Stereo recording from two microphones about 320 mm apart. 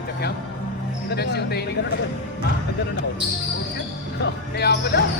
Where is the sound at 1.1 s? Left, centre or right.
Left.